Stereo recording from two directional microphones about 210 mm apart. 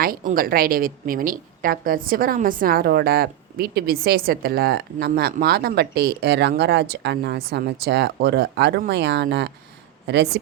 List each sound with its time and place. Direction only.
0.0 s a woman's voice: 45° right (ahead or behind)